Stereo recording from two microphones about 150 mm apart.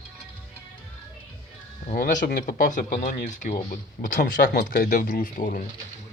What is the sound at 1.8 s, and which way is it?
Speech, 60° left (ahead or behind).